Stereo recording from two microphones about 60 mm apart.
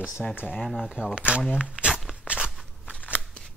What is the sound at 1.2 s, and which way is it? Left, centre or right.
Speech, centre.